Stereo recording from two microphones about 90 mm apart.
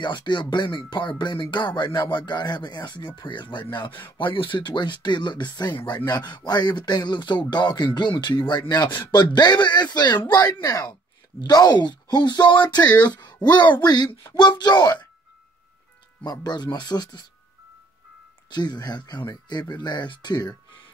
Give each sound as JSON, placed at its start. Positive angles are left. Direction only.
{"t": 0.0, "sound": "speech", "side_deg": 60}
{"t": 4.2, "sound": "speech", "side_deg": 70}
{"t": 16.3, "sound": "speech", "side_deg": 50}
{"t": 18.5, "sound": "speech", "side_deg": 50}